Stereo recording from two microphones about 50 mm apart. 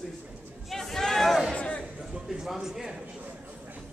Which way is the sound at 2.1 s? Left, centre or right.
Centre.